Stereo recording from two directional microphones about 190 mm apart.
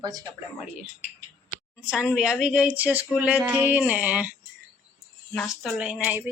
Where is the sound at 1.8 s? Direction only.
5° right (ahead or behind).